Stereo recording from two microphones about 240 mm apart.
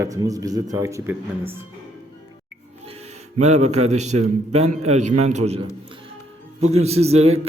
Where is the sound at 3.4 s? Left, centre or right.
Right.